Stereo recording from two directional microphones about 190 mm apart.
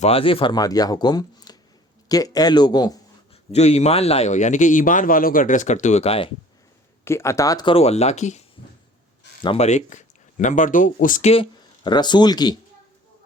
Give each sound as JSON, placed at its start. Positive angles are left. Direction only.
{"t": 0.0, "sound": "speech", "side_deg": 30}
{"t": 3.5, "sound": "a man's voice", "side_deg": 35}
{"t": 7.0, "sound": "speech", "side_deg": 15}
{"t": 11.3, "sound": "speech", "side_deg": 25}